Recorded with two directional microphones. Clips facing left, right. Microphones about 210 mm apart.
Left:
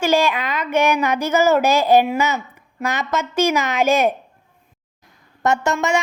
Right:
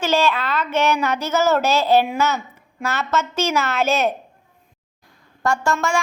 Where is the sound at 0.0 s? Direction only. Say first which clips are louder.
Left 2 dB; 15° left (ahead or behind).